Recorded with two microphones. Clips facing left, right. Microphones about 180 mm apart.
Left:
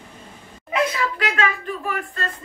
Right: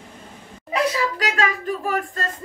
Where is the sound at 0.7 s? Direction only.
40° right (ahead or behind).